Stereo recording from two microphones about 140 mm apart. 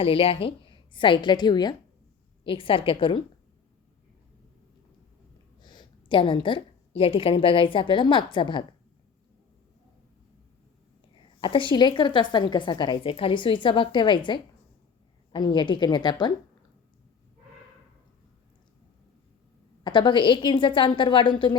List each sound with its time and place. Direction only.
0.0 s a woman's voice: 40° left (ahead or behind)
5.6 s a woman's voice: 35° left (ahead or behind)
11.1 s a woman's voice: 35° left (ahead or behind)
19.8 s a woman's voice: 35° left (ahead or behind)